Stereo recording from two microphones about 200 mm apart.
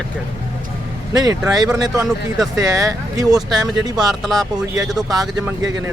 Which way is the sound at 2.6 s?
15° right (ahead or behind).